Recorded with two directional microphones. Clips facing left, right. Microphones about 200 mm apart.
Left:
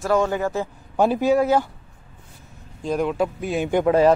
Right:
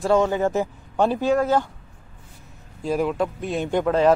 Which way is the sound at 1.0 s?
10° left (ahead or behind).